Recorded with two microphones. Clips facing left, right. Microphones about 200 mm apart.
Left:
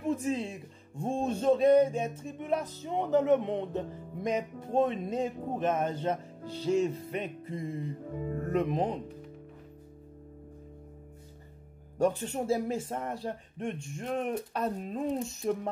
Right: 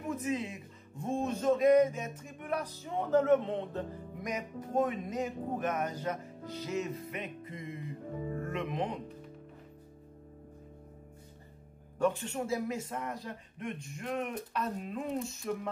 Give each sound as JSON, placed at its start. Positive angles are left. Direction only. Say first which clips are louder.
{"t": 0.0, "sound": "speech", "louder": "left 4 dB", "side_deg": 30}
{"t": 4.2, "sound": "speech", "louder": "left 7 dB", "side_deg": 25}
{"t": 12.0, "sound": "speech", "louder": "left 3 dB", "side_deg": 35}